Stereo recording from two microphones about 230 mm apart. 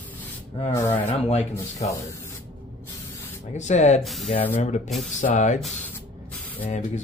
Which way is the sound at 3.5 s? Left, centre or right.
Left.